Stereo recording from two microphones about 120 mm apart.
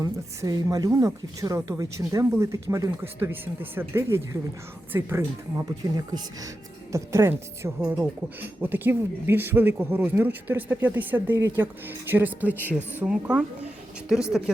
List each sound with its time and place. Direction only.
0.0 s speech: 30° right (ahead or behind)
6.9 s speech: 20° right (ahead or behind)
7.8 s speech: 10° right (ahead or behind)
11.3 s a woman's voice: 25° right (ahead or behind); by 14.5 s 5° right (ahead or behind)